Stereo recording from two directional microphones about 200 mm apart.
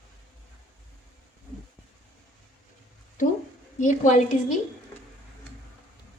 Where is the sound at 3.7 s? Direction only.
35° left (ahead or behind).